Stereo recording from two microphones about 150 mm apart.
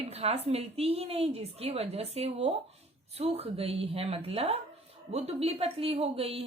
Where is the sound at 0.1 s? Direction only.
45° right (ahead or behind).